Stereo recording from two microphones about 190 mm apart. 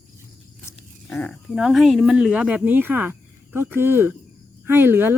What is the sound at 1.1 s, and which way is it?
Speech, centre (ahead or behind).